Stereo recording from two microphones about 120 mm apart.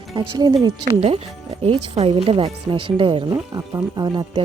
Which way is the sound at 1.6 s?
55° right (ahead or behind).